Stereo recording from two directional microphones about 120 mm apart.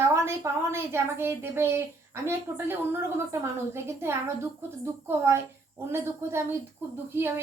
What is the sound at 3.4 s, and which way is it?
A woman's voice, 20° right (ahead or behind).